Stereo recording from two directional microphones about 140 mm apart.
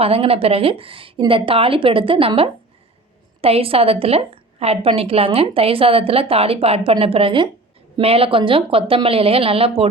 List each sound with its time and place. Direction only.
0.0 s a woman's voice: 45° right (ahead or behind)